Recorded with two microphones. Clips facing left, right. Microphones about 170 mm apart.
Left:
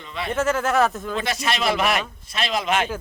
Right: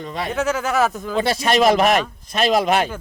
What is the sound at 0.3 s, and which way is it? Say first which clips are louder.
Speech: even; centre (ahead or behind).